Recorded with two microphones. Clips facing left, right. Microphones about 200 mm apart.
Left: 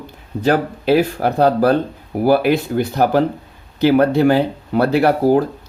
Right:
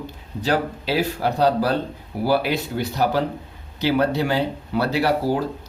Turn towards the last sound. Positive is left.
turn(degrees=50)  # may be behind; listen again after turning